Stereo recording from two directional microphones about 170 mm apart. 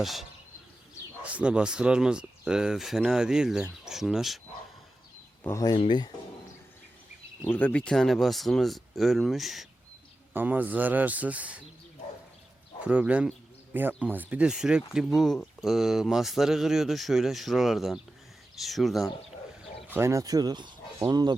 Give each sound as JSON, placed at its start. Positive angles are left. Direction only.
{"t": 0.0, "sound": "speech", "side_deg": 0}
{"t": 5.4, "sound": "speech", "side_deg": 15}
{"t": 5.7, "sound": "speech", "side_deg": 30}
{"t": 7.4, "sound": "speech", "side_deg": 10}
{"t": 12.8, "sound": "speech", "side_deg": -10}
{"t": 19.9, "sound": "speech", "side_deg": -15}